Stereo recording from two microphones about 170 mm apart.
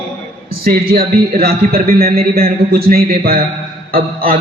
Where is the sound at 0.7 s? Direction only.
60° right (ahead or behind).